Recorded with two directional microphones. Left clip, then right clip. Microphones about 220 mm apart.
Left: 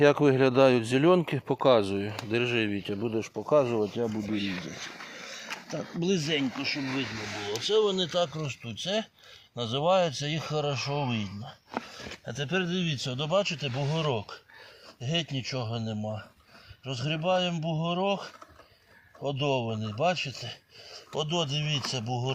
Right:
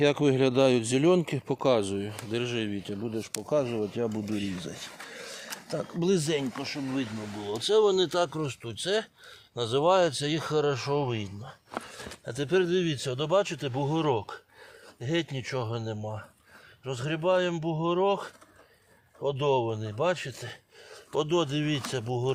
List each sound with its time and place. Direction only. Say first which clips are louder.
0.0 s speech: left 2 dB; centre (ahead or behind)
3.9 s speech: even; 10° right (ahead or behind)
5.7 s speech: right 3 dB; 35° right (ahead or behind)
7.7 s speech: right 3 dB; 45° right (ahead or behind)